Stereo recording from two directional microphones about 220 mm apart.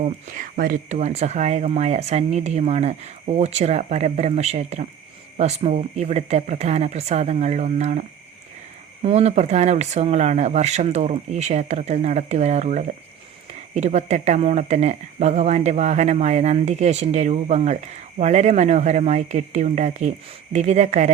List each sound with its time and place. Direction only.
0.0 s speech: 35° right (ahead or behind)
9.0 s speech: 30° right (ahead or behind)